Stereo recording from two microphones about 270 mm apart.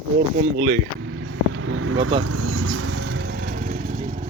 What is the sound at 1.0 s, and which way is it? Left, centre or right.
Vehicle, right.